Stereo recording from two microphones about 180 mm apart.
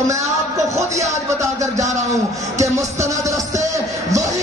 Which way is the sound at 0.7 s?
15° right (ahead or behind).